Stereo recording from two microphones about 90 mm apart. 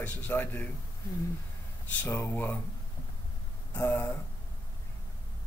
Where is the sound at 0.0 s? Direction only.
20° left (ahead or behind).